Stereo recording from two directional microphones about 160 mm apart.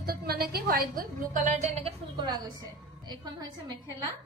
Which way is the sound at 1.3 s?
45° right (ahead or behind).